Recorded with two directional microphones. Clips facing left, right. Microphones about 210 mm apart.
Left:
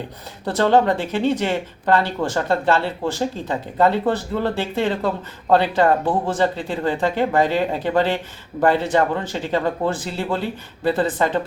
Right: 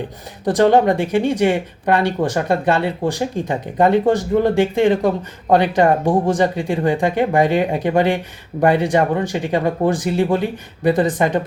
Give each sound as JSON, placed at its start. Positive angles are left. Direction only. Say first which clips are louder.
{"t": 0.4, "sound": "speech", "louder": "right 3 dB", "side_deg": -15}